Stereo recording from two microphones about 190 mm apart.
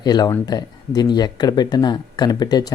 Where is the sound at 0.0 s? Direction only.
20° left (ahead or behind).